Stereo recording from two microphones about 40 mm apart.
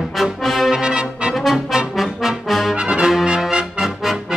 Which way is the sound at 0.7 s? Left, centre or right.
Right.